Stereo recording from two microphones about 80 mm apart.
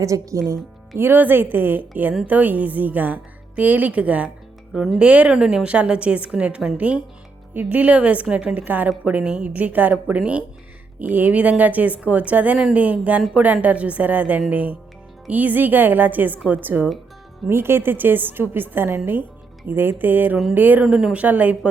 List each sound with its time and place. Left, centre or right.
0.0 s a woman's voice: right
20.8 s a woman's voice: centre